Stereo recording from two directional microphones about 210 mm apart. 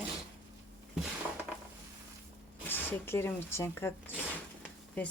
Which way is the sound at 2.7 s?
10° left (ahead or behind).